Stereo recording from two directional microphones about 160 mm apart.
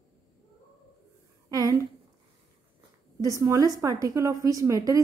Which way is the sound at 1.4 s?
20° right (ahead or behind).